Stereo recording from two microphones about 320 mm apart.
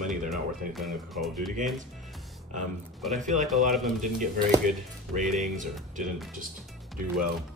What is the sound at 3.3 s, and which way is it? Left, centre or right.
Speech, centre.